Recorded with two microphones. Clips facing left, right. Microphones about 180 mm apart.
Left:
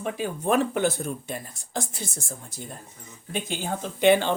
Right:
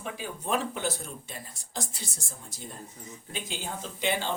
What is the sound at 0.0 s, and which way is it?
Speech, 55° left (ahead or behind).